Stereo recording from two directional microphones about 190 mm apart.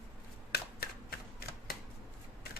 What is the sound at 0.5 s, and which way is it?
Shuffling cards, 60° left (ahead or behind).